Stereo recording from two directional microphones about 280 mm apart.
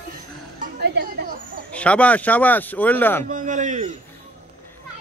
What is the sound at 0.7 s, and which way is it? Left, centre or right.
Speech, right.